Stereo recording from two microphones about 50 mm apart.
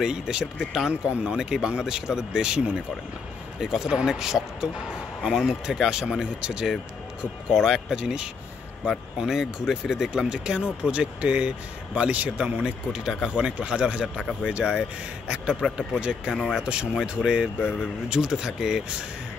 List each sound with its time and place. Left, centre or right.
0.0 s speech: centre
3.6 s speech: centre
14.0 s speech: centre